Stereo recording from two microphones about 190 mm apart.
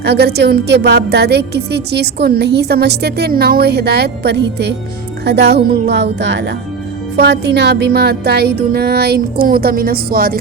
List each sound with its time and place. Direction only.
0.0 s a woman's voice: 60° right (ahead or behind)